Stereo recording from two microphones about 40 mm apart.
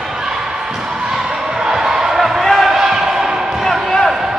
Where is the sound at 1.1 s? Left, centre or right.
Centre.